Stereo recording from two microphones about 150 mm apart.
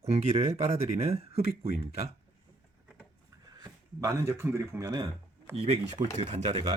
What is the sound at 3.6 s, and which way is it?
Speech, 20° right (ahead or behind).